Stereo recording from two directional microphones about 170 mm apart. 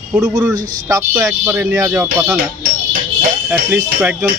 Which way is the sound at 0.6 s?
50° right (ahead or behind).